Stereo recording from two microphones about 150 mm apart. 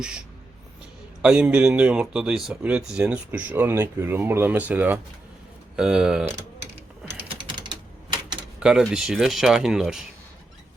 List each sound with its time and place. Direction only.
1.2 s speech: 5° right (ahead or behind)
7.3 s typing: 35° right (ahead or behind)
8.5 s speech: 5° right (ahead or behind)